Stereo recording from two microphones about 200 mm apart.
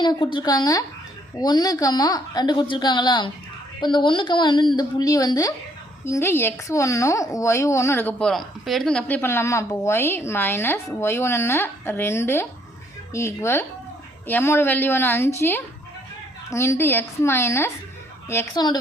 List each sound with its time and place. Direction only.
0.0 s a woman's voice: 20° left (ahead or behind)